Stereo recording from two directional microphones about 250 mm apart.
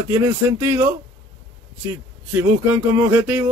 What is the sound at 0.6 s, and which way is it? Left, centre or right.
Speech, centre.